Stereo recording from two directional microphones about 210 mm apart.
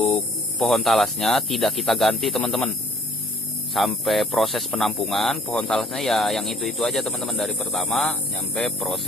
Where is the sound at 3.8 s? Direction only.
Centre (ahead or behind).